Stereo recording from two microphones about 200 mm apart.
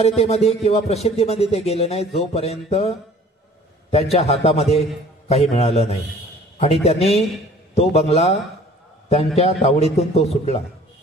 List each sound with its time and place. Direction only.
0.0 s speech: 30° left (ahead or behind)
3.9 s a man's voice: 30° left (ahead or behind)